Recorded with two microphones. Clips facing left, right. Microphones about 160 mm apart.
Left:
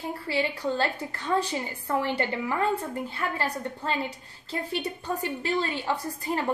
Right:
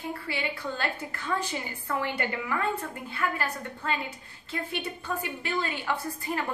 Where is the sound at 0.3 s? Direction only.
35° left (ahead or behind).